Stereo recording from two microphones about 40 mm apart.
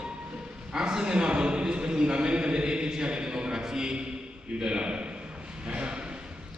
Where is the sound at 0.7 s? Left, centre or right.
Centre.